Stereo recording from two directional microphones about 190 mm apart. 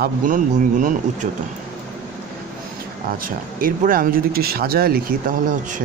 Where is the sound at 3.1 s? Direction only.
50° right (ahead or behind).